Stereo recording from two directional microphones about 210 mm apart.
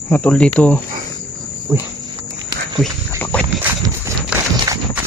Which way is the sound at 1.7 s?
Centre (ahead or behind).